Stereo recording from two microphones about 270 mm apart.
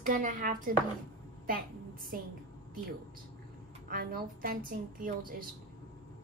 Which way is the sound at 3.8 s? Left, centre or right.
Right.